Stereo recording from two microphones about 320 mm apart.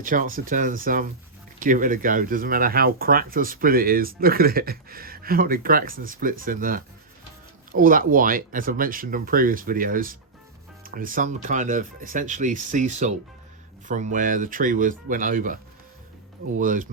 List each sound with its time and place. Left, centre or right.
0.0 s speech: right
16.6 s speech: right